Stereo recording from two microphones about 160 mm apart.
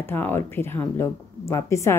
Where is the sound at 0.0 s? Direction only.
15° left (ahead or behind).